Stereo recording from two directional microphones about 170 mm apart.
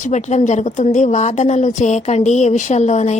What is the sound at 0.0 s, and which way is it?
A woman's voice, 45° left (ahead or behind).